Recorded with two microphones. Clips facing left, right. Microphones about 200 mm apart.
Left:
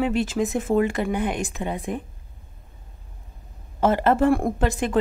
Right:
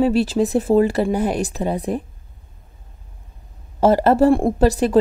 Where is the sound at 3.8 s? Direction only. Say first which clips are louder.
Right 5 dB; 35° right (ahead or behind).